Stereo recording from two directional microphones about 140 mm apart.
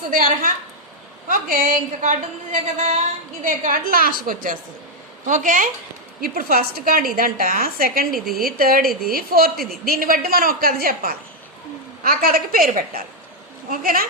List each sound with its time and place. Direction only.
0.1 s a woman's voice: 85° right
1.3 s a woman's voice: 70° right (ahead or behind)
3.4 s a woman's voice: 70° right (ahead or behind)
5.2 s a woman's voice: 65° right (ahead or behind)
6.2 s a woman's voice: 90° right